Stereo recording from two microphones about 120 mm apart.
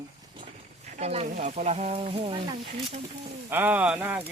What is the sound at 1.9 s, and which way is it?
Speech, 50° right (ahead or behind).